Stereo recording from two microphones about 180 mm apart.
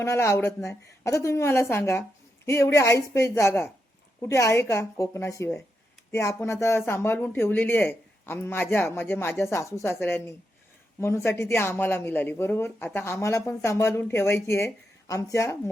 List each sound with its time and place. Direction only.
0.0 s a woman's voice: 15° left (ahead or behind)